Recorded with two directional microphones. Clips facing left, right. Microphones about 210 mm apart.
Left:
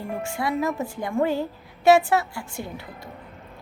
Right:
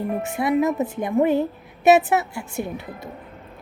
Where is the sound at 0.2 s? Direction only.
20° right (ahead or behind).